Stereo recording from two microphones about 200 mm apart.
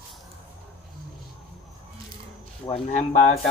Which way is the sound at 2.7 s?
35° left (ahead or behind).